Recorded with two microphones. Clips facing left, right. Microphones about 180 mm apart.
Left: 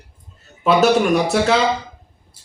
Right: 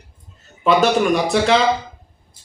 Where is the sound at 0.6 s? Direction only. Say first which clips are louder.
Left 1 dB; 5° left (ahead or behind).